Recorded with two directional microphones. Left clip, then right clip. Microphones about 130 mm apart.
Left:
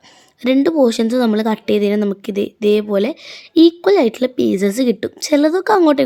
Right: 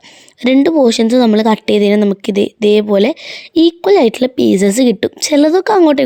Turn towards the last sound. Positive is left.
turn(degrees=-35)  # may be behind; listen again after turning